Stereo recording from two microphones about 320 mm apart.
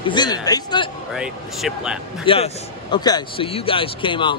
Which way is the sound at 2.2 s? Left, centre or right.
Centre.